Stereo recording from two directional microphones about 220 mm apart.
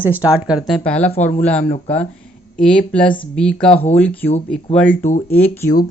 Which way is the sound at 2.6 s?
5° left (ahead or behind).